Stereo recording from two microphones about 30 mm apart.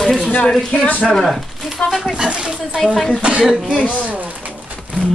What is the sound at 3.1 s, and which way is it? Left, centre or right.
Speech, right.